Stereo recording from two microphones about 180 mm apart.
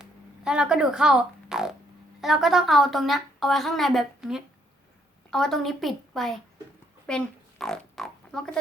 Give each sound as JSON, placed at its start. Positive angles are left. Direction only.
{"t": 0.0, "sound": "fart", "side_deg": -5}
{"t": 2.2, "sound": "a woman's voice", "side_deg": 0}